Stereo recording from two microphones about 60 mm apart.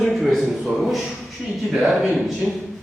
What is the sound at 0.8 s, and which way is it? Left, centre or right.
A man's voice, centre.